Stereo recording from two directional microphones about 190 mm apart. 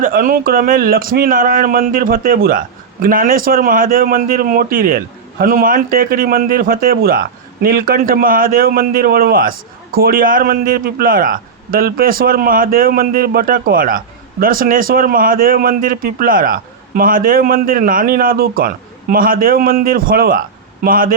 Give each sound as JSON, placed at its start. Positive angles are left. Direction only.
{"t": 0.0, "sound": "speech", "side_deg": -45}